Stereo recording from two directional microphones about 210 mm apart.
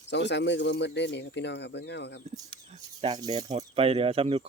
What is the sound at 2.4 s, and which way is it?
Speech, 25° right (ahead or behind).